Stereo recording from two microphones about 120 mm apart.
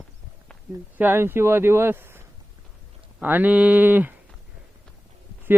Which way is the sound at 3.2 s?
15° right (ahead or behind).